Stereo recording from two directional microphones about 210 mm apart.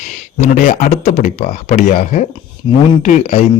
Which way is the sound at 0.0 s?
35° left (ahead or behind).